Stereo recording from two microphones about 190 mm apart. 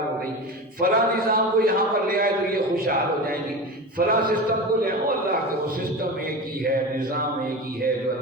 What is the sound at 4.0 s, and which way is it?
Speech, 50° right (ahead or behind).